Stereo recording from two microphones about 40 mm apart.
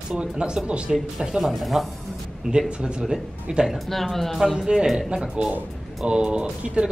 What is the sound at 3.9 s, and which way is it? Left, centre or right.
Speech, centre.